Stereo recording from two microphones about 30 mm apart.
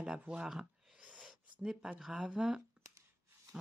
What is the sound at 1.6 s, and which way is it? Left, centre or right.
Speech, right.